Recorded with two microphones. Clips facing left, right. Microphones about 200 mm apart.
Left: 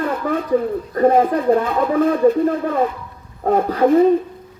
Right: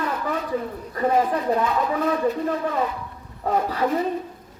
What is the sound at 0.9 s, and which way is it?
Speech, 50° left (ahead or behind).